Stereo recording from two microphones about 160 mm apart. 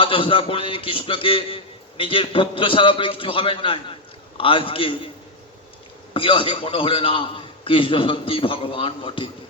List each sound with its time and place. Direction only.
0.0 s a man's voice: 35° left (ahead or behind)
6.1 s a man's voice: 30° left (ahead or behind)